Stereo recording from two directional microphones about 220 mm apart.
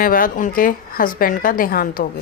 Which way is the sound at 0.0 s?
40° left (ahead or behind).